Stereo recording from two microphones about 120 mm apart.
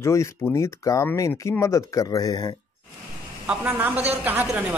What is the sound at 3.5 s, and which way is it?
Speech, 15° right (ahead or behind).